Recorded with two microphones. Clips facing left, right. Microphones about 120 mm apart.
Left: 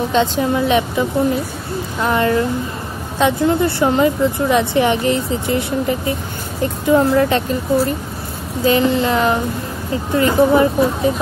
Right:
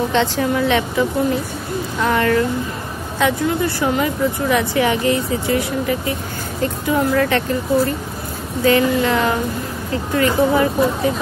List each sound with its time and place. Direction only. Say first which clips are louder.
0.1 s speech: left 2 dB; 20° left (ahead or behind)
2.0 s speech: left 1 dB; 20° left (ahead or behind)